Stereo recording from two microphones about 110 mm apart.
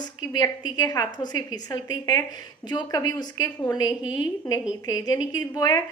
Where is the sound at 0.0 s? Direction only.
40° left (ahead or behind).